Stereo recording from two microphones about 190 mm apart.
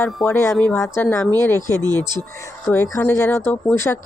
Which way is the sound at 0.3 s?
15° left (ahead or behind).